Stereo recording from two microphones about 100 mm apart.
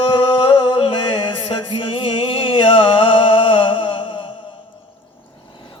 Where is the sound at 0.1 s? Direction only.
60° left (ahead or behind).